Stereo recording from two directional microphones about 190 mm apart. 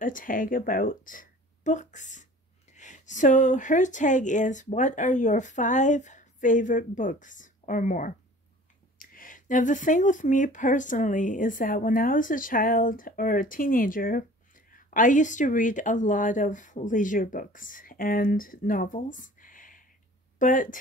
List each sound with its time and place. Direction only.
0.0 s speech: 45° left (ahead or behind)